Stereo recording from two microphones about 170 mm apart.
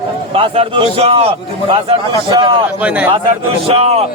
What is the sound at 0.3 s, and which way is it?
A man's voice, 30° right (ahead or behind).